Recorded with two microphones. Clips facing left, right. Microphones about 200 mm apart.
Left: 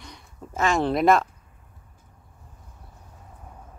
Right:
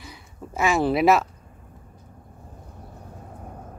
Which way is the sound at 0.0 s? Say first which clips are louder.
Right 2 dB; 5° right (ahead or behind).